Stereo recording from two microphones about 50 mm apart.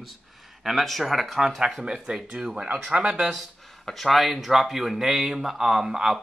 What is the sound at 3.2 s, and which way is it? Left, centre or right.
Speech, centre.